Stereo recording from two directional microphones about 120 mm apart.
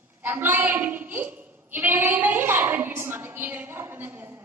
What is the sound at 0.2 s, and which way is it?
A woman's voice, 15° right (ahead or behind).